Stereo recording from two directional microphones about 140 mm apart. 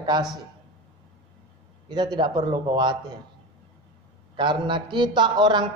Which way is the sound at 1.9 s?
30° right (ahead or behind).